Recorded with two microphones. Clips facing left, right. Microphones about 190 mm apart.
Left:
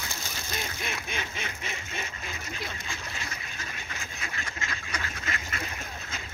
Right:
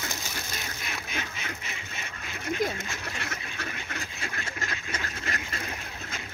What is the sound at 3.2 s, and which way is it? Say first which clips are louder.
Duck: right 4 dB; 60° right (ahead or behind).